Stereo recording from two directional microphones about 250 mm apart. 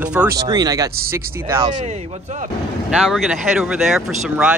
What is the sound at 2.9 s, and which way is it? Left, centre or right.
Speech, centre.